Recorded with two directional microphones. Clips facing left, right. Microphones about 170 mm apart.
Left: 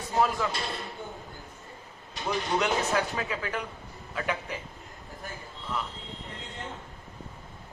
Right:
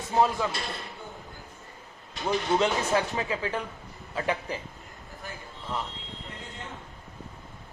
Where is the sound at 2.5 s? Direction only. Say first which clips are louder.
Right 2 dB; 25° right (ahead or behind).